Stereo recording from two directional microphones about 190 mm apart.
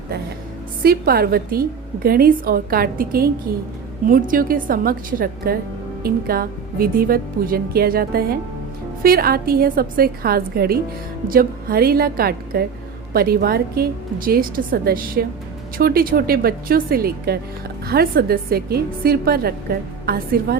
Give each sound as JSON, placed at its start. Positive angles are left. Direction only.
{"t": 0.8, "sound": "a woman's voice", "side_deg": -50}